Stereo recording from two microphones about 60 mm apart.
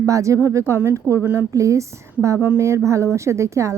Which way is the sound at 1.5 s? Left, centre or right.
Right.